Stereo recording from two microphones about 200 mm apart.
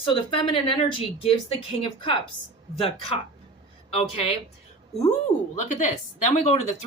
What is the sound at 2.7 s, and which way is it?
Speech, 30° left (ahead or behind).